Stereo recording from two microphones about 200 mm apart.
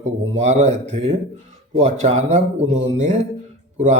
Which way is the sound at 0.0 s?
35° right (ahead or behind).